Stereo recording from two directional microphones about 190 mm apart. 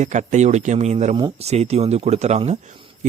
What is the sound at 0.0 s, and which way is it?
Speech, 40° right (ahead or behind).